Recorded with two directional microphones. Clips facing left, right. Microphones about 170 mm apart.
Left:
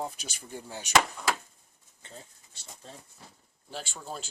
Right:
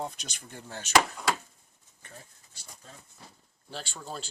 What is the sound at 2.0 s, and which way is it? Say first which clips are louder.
Pigeon: left 2 dB; 25° left (ahead or behind).